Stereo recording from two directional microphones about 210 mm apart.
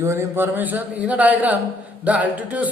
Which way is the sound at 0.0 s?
15° right (ahead or behind).